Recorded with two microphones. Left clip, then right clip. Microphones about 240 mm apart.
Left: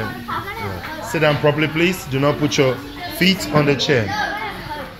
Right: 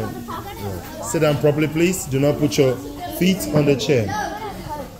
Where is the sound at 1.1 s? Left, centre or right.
Centre.